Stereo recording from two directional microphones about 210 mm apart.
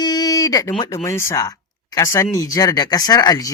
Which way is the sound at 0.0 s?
20° left (ahead or behind).